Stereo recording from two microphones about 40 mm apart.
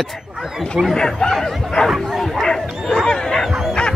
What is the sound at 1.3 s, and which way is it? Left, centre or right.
Bow-wow, centre.